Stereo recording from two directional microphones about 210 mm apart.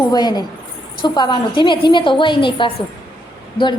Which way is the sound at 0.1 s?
20° left (ahead or behind).